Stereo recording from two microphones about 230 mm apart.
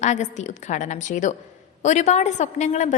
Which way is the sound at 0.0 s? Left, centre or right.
Left.